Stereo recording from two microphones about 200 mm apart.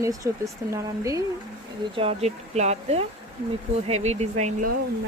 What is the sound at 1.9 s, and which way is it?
Speech, 30° right (ahead or behind).